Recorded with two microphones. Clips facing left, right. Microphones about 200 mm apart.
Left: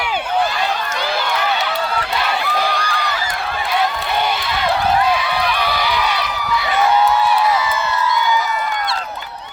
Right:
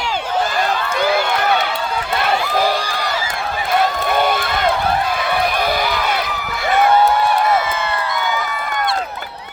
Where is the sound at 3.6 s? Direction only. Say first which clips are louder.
Right 3 dB; 50° right (ahead or behind).